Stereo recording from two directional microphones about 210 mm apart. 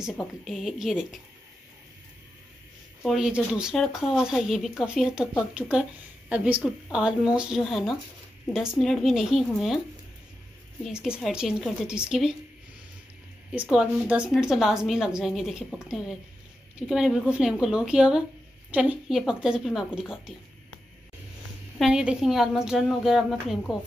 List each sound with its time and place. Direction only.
0.0 s a woman's voice: centre (ahead or behind)
3.0 s a woman's voice: centre (ahead or behind)
10.8 s a woman's voice: 5° right (ahead or behind)
13.5 s a woman's voice: 5° right (ahead or behind)
21.7 s a woman's voice: centre (ahead or behind)